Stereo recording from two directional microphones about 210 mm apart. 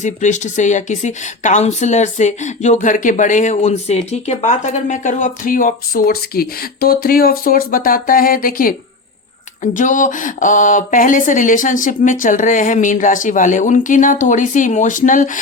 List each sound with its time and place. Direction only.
0.0 s a woman's voice: 35° left (ahead or behind)
9.7 s a woman's voice: 35° left (ahead or behind)